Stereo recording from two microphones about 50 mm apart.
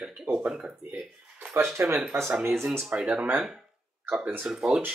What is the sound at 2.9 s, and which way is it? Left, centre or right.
Speech, centre.